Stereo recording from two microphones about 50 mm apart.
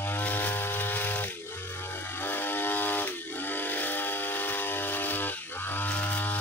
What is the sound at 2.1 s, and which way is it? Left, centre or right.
Vehicle, left.